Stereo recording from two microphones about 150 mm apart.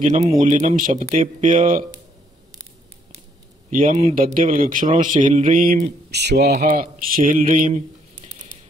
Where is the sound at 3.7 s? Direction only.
60° right (ahead or behind); by 6.5 s 90° right.